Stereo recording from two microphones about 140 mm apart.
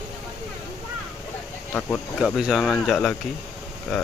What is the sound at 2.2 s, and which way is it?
Speech, centre (ahead or behind).